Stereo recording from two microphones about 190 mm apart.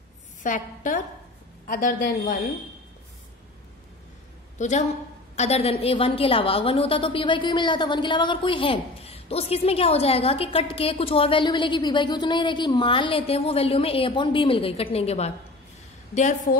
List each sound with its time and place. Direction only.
0.4 s a woman's voice: 45° left (ahead or behind)
4.6 s a woman's voice: 40° left (ahead or behind)